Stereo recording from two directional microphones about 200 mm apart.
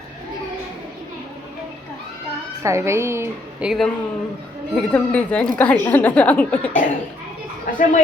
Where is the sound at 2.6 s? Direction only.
15° right (ahead or behind).